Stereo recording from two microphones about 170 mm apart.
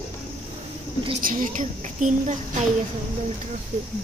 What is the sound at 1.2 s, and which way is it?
A woman's voice, 50° right (ahead or behind).